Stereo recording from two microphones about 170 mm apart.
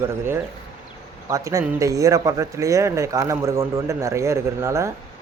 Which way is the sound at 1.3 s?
20° right (ahead or behind).